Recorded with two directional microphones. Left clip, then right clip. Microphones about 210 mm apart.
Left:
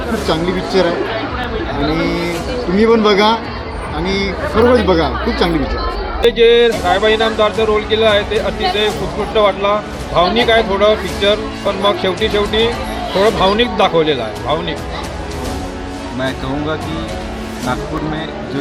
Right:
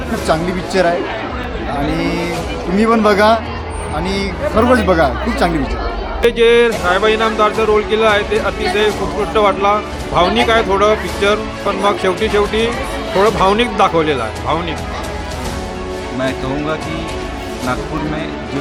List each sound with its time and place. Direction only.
0.3 s speech: 20° right (ahead or behind)
2.0 s speech: 20° right (ahead or behind)
6.2 s speech: 10° right (ahead or behind)